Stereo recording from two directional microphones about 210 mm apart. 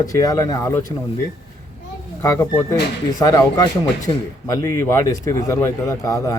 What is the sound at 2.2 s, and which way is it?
A man's voice, 15° left (ahead or behind).